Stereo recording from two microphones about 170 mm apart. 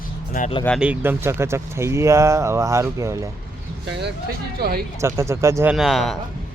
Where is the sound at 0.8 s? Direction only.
10° right (ahead or behind).